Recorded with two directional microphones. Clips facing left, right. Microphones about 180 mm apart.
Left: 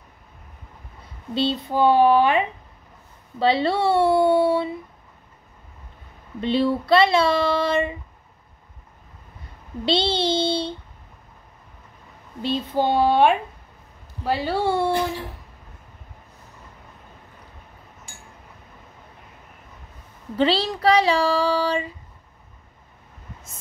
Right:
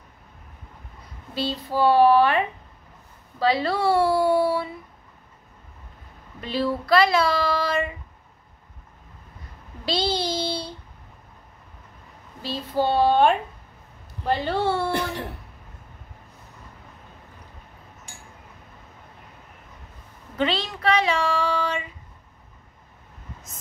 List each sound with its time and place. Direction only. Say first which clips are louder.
1.3 s speech: left 4 dB; 20° left (ahead or behind)
3.3 s child singing: left 2 dB; 25° left (ahead or behind)
6.4 s child singing: left 5 dB; 25° left (ahead or behind)
9.8 s child singing: left 4 dB; 25° left (ahead or behind)
12.4 s speech: left 2 dB; 20° left (ahead or behind)
20.3 s child singing: left 5 dB; 35° left (ahead or behind)